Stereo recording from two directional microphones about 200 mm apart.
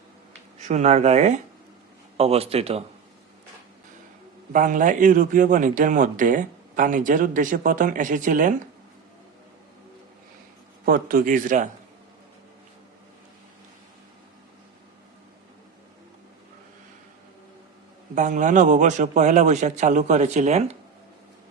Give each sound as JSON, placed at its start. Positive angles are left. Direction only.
{"t": 0.7, "sound": "a man's voice", "side_deg": -35}
{"t": 4.5, "sound": "a man's voice", "side_deg": -40}
{"t": 10.8, "sound": "a man's voice", "side_deg": -45}
{"t": 18.1, "sound": "a man's voice", "side_deg": -40}